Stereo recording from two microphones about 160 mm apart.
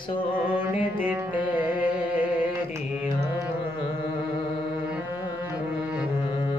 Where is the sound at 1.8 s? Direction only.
10° right (ahead or behind).